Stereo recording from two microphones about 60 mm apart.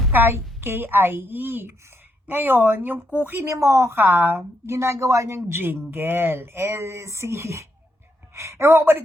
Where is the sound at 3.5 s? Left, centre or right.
Right.